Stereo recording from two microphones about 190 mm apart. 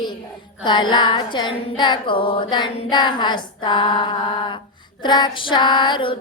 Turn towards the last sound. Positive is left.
turn(degrees=25)  # may be behind; listen again after turning